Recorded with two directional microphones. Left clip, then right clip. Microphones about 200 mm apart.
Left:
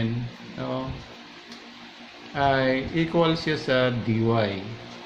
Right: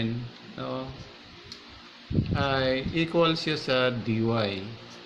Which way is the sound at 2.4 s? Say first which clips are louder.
Left 5 dB; 20° right (ahead or behind).